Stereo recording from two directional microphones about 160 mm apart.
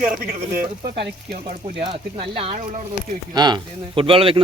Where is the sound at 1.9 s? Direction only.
35° right (ahead or behind).